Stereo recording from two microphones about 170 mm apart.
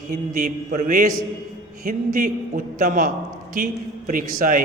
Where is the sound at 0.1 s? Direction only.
55° right (ahead or behind).